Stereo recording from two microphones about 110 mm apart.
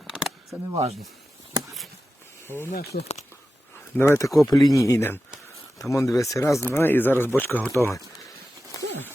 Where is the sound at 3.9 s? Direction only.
25° left (ahead or behind).